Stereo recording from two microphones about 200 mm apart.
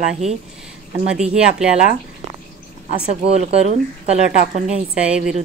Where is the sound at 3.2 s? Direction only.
35° right (ahead or behind).